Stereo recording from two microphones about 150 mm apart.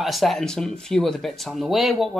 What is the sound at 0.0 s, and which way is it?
A woman's voice, centre (ahead or behind).